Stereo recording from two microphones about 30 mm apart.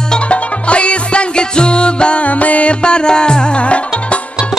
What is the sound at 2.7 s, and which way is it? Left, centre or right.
Music, left.